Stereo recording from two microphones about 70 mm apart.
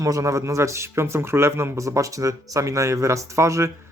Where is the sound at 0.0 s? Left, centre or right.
Right.